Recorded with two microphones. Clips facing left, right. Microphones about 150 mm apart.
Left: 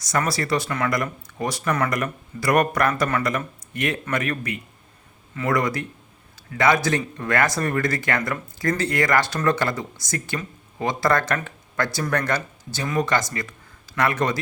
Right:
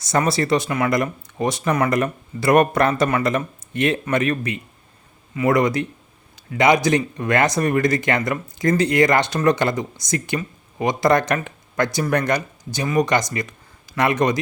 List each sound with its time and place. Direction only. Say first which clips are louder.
0.0 s speech: right 4 dB; 25° right (ahead or behind)